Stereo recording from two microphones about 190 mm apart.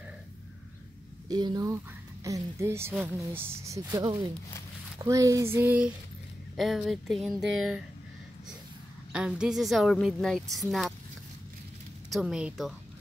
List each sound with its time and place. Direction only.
1.3 s a woman's voice: 20° right (ahead or behind); by 7.4 s centre (ahead or behind)
9.1 s a woman's voice: 5° right (ahead or behind)
12.1 s a woman's voice: centre (ahead or behind)